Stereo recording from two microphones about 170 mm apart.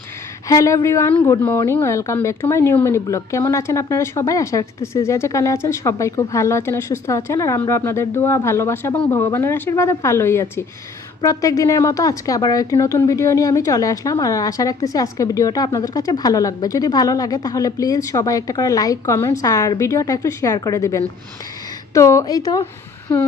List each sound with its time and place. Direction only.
0.4 s a woman's voice: 20° left (ahead or behind)